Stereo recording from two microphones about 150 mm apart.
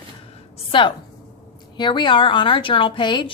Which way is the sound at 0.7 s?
35° left (ahead or behind).